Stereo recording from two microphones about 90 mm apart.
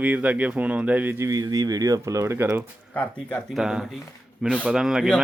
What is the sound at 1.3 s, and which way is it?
Speech, 45° right (ahead or behind).